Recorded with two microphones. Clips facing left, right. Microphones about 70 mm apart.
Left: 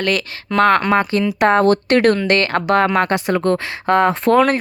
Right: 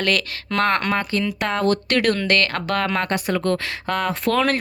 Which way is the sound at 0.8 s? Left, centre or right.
Centre.